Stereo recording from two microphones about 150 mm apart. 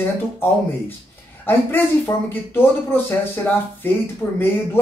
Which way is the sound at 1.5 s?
15° left (ahead or behind).